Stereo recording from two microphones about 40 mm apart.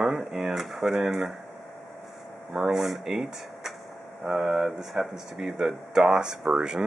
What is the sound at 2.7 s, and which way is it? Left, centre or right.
Speech, centre.